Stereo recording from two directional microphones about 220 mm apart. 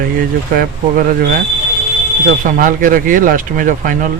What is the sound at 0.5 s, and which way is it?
Speech, 40° right (ahead or behind).